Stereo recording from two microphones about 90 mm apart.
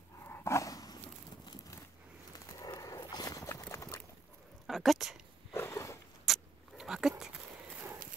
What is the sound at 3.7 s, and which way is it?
Clip-clop, 35° left (ahead or behind).